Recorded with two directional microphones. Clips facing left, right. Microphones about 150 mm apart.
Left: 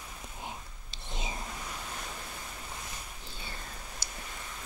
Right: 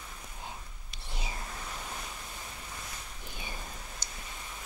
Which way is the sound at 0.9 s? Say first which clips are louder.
Left 2 dB; 20° left (ahead or behind).